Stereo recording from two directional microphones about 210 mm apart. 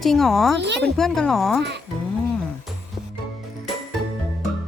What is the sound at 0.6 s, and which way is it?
Speech, 55° right (ahead or behind).